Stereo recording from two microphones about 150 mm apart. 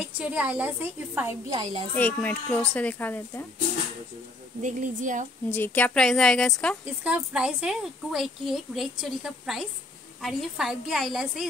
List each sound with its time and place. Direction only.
0.0 s a woman's voice: 10° right (ahead or behind)
1.5 s a child's voice: 35° right (ahead or behind)
2.0 s speech: 10° left (ahead or behind)
4.6 s speech: 55° right (ahead or behind)
5.5 s a woman's voice: 10° left (ahead or behind)
7.0 s a woman's voice: 5° right (ahead or behind)